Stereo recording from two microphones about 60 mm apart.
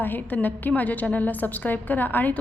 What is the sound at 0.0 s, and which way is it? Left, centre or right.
A woman's voice, left.